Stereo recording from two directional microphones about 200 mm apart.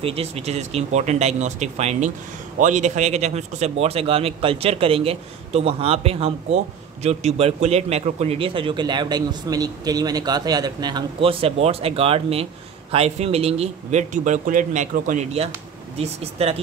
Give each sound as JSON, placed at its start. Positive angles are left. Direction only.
{"t": 0.0, "sound": "a man's voice", "side_deg": -30}